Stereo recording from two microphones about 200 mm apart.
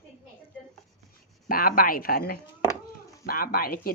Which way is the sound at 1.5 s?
45° left (ahead or behind).